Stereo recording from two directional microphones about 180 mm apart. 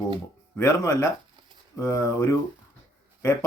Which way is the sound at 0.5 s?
15° left (ahead or behind).